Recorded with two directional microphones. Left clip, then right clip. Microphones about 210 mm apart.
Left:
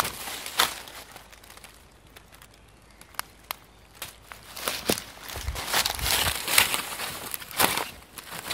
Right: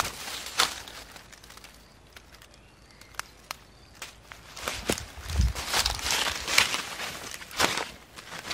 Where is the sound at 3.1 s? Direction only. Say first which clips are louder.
Left 2 dB; 40° left (ahead or behind).